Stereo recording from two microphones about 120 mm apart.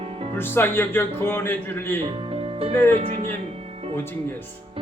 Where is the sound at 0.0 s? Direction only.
55° right (ahead or behind).